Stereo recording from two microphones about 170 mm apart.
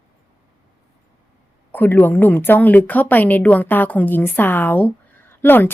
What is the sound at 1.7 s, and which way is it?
A woman's voice, 10° left (ahead or behind).